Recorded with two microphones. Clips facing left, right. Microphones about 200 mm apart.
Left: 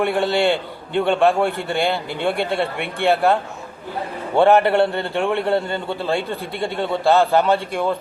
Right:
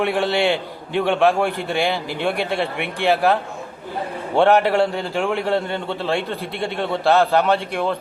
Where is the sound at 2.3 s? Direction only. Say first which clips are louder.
Left 1 dB; 55° left (ahead or behind).